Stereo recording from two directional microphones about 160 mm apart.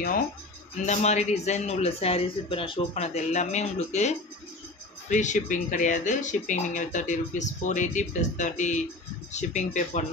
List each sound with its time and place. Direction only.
0.8 s speech: 45° left (ahead or behind)